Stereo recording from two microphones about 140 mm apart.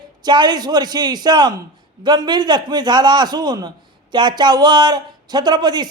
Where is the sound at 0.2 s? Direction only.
30° right (ahead or behind).